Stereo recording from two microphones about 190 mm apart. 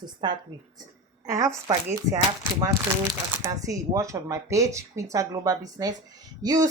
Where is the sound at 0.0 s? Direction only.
20° right (ahead or behind).